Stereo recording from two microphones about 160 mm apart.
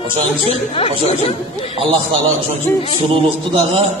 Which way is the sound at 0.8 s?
40° left (ahead or behind).